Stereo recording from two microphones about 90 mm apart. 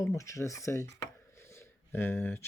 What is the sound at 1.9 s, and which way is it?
Speech, 25° left (ahead or behind).